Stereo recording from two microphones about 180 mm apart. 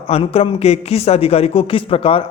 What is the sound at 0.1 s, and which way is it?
Speech, 35° left (ahead or behind).